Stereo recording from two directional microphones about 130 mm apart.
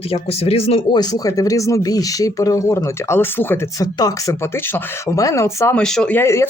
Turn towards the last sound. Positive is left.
turn(degrees=20)  # may be behind; listen again after turning